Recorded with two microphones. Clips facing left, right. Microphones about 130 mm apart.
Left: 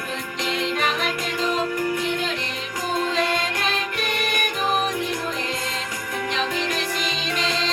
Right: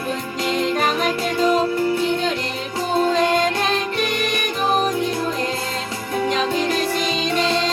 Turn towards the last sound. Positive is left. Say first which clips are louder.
# right 6 dB
turn(degrees=-30)  # may be behind; listen again after turning